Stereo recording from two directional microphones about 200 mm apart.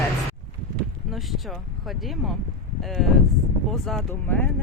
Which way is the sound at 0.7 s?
Centre (ahead or behind).